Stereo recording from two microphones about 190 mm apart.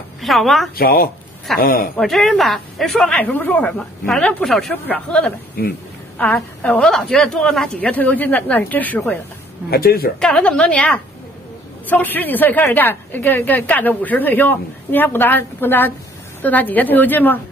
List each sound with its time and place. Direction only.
0.2 s speech: centre (ahead or behind)
0.7 s speech: 50° left (ahead or behind)
2.0 s a woman's voice: centre (ahead or behind)
9.7 s speech: 55° left (ahead or behind)
10.2 s a woman's voice: 5° left (ahead or behind)